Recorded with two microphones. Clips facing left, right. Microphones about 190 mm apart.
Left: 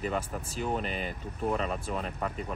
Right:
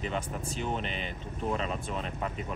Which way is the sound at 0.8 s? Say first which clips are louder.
Left 2 dB; 40° left (ahead or behind).